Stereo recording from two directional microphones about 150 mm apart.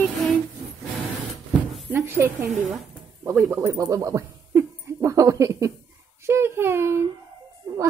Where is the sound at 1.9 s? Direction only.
15° right (ahead or behind).